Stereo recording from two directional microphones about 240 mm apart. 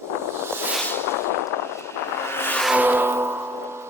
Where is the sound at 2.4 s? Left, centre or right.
Centre.